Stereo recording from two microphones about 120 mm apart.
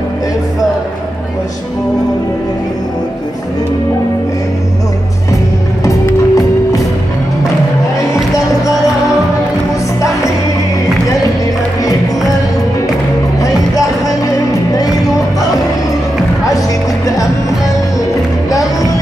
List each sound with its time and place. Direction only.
5.9 s music: 30° left (ahead or behind)
8.1 s music: 30° left (ahead or behind)
13.4 s music: 30° left (ahead or behind)
16.4 s music: 30° left (ahead or behind)